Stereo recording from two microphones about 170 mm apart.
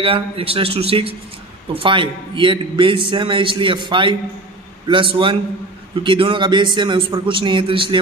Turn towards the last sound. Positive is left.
turn(degrees=-30)  # may be behind; listen again after turning